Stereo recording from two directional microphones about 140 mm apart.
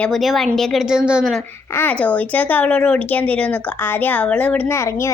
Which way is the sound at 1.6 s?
15° left (ahead or behind).